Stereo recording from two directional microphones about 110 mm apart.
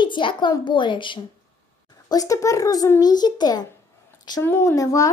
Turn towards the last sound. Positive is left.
turn(degrees=30)  # may be behind; listen again after turning